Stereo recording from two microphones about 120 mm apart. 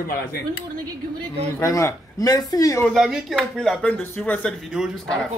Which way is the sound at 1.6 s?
25° left (ahead or behind).